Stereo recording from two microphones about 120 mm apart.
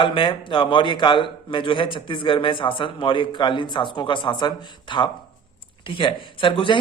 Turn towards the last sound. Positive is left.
turn(degrees=45)  # may be behind; listen again after turning